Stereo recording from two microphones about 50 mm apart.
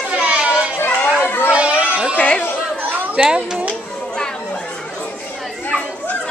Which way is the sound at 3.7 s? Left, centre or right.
Centre.